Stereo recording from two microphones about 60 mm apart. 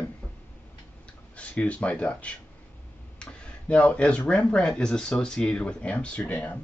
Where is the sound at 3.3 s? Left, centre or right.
Left.